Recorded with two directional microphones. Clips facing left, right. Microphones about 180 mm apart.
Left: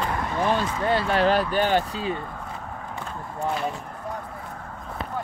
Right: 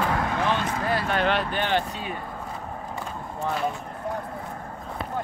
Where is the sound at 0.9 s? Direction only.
30° left (ahead or behind).